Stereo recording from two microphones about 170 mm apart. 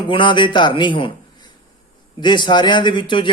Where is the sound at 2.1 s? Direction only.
25° left (ahead or behind).